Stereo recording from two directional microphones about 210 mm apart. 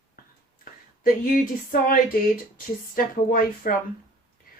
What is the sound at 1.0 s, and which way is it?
Speech, 40° left (ahead or behind).